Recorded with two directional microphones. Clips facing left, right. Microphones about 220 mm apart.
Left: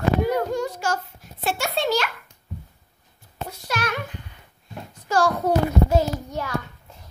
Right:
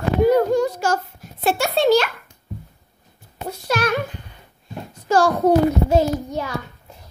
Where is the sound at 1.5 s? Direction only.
35° right (ahead or behind).